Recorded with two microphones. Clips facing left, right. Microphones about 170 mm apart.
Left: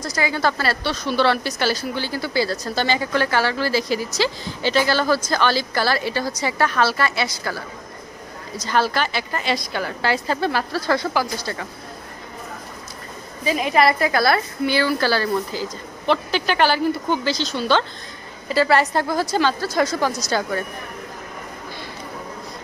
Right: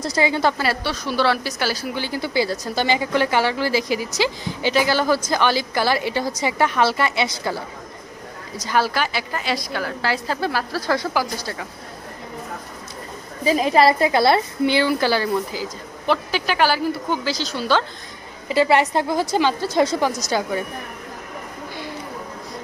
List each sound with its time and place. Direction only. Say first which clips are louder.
0.0 s a woman's voice: right 2 dB; 25° right (ahead or behind)
8.6 s a woman's voice: even; 10° right (ahead or behind)
13.4 s a woman's voice: right 2 dB; 35° right (ahead or behind); by 17.8 s 5° right (ahead or behind)
18.5 s a woman's voice: right 1 dB; 20° right (ahead or behind)